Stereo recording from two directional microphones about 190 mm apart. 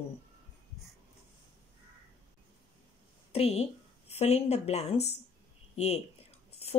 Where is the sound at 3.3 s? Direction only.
30° left (ahead or behind).